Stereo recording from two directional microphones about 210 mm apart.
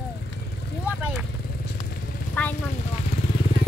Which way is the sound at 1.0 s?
5° right (ahead or behind).